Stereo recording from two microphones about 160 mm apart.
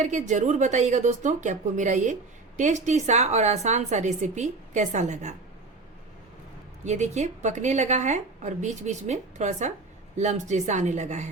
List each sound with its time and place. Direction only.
0.0 s a woman's voice: 50° right (ahead or behind)
6.8 s a woman's voice: 45° right (ahead or behind)